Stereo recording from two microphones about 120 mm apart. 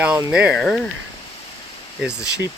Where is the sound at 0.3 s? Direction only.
10° right (ahead or behind).